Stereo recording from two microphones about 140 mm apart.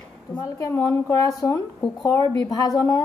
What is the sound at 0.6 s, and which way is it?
A woman's voice, 20° left (ahead or behind).